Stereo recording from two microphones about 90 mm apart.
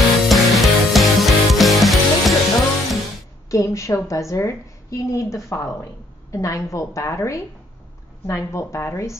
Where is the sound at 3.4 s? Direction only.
35° left (ahead or behind).